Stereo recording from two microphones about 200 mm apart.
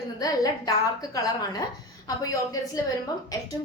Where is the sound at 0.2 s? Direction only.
20° left (ahead or behind).